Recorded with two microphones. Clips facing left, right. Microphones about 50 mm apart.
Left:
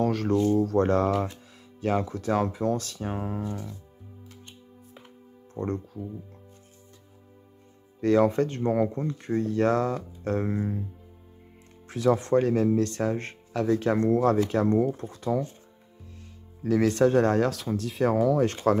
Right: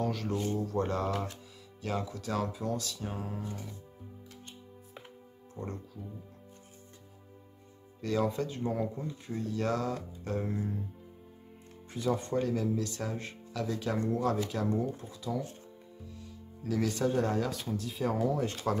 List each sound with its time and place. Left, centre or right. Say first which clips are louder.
0.0 s speech: left 9 dB; left
1.8 s speech: left 9 dB; left
5.5 s speech: left 10 dB; left
8.0 s speech: left 9 dB; left
10.4 s speech: left 6 dB; left
11.9 s speech: left 9 dB; left
12.4 s speech: left 8 dB; left
16.6 s speech: left 9 dB; left
17.6 s speech: left 7 dB; left